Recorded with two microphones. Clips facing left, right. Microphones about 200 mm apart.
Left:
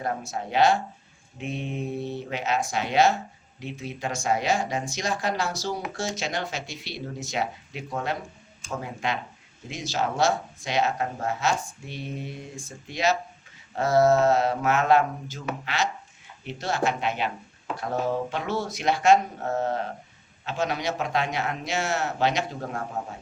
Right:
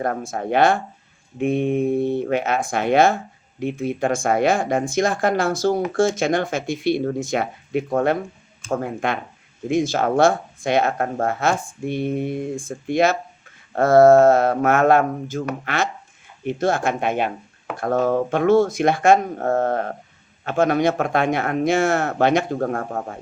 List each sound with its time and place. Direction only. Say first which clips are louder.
0.0 s speech: right 6 dB; 55° right (ahead or behind)